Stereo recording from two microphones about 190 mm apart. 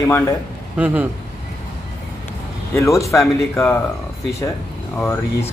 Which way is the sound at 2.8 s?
15° left (ahead or behind).